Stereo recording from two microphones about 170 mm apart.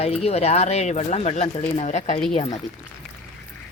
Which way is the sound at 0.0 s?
35° left (ahead or behind).